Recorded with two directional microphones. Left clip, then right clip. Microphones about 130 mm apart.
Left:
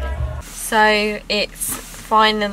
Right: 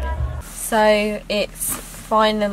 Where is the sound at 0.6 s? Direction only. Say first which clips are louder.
Left 1 dB; centre (ahead or behind).